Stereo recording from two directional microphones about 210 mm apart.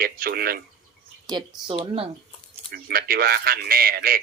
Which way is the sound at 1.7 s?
25° right (ahead or behind).